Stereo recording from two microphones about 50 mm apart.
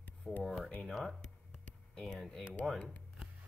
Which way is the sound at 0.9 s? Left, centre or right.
Centre.